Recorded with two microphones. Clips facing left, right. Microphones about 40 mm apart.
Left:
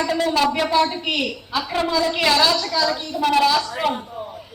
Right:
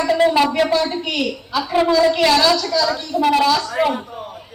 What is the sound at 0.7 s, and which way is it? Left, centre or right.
Speech, centre.